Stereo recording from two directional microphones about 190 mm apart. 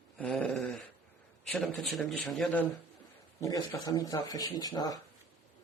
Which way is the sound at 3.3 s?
20° left (ahead or behind).